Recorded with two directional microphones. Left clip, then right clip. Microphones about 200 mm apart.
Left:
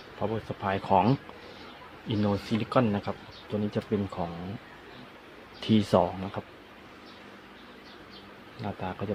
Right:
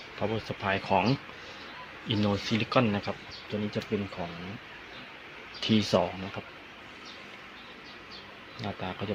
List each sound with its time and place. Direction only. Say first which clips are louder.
0.2 s speech: even; 5° left (ahead or behind)
3.9 s speech: left 2 dB; 20° left (ahead or behind)
5.5 s speech: left 2 dB; 15° left (ahead or behind)
8.6 s speech: left 1 dB; 10° left (ahead or behind)